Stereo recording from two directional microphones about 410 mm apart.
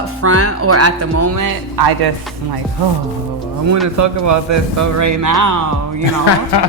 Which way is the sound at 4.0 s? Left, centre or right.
Right.